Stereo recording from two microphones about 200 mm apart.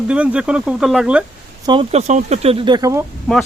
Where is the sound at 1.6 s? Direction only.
25° right (ahead or behind).